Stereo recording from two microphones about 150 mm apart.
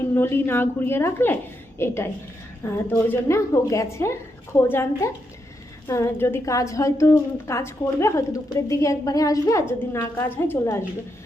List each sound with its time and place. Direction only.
0.1 s a woman's voice: 15° left (ahead or behind)